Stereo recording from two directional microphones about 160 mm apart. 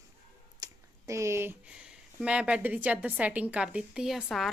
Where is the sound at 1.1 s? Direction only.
20° right (ahead or behind); by 4.5 s centre (ahead or behind).